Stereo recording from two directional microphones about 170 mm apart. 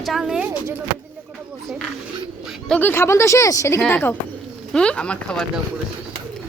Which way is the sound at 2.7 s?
10° left (ahead or behind).